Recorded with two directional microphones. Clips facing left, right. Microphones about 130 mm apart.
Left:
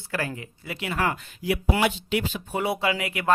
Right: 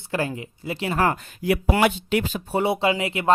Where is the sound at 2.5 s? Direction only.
25° right (ahead or behind).